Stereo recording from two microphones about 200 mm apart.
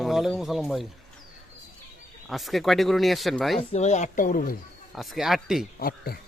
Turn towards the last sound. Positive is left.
turn(degrees=50)  # may be behind; listen again after turning